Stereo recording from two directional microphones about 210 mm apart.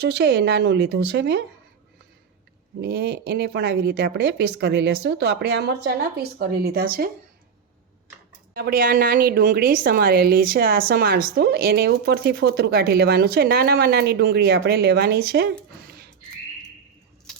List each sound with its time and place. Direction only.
0.0 s a woman's voice: 50° right (ahead or behind)
2.8 s a woman's voice: 50° right (ahead or behind)
8.5 s a woman's voice: 45° right (ahead or behind)